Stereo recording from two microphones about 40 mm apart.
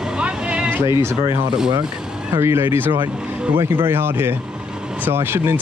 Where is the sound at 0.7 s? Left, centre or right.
Right.